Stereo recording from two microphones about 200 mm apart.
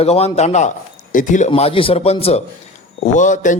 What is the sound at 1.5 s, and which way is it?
A man's voice, 30° left (ahead or behind).